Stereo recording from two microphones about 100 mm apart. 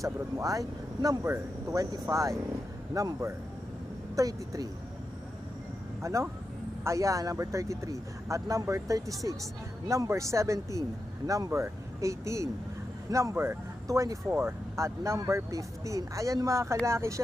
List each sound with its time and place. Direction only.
0.0 s speech: 35° right (ahead or behind)
6.0 s speech: 30° right (ahead or behind)